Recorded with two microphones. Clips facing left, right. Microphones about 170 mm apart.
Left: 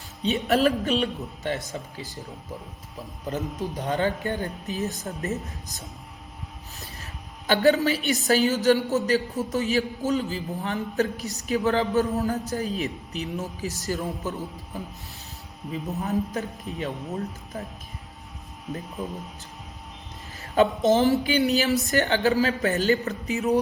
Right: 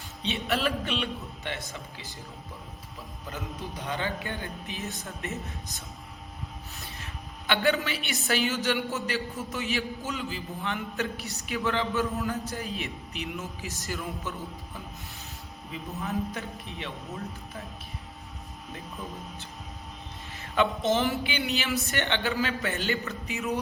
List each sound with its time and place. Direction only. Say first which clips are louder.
0.2 s a woman's voice: left 7 dB; 45° left (ahead or behind)
3.2 s a man's voice: left 8 dB; 45° left (ahead or behind)
7.4 s a woman's voice: left 6 dB; 40° left (ahead or behind)
21.0 s a woman's voice: left 8 dB; 40° left (ahead or behind)